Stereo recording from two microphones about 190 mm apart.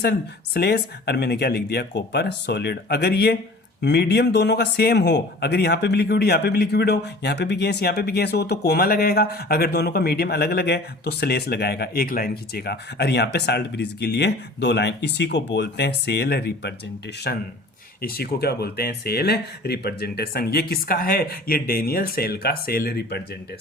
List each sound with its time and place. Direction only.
0.0 s speech: 55° left (ahead or behind)